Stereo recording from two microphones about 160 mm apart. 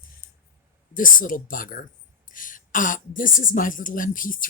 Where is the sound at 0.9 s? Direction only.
60° left (ahead or behind).